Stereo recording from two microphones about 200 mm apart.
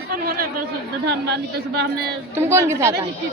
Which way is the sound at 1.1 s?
55° right (ahead or behind).